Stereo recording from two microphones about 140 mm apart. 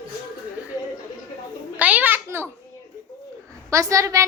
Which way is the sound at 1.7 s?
10° right (ahead or behind).